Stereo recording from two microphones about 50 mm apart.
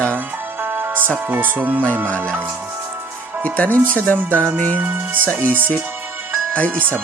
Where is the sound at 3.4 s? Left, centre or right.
Left.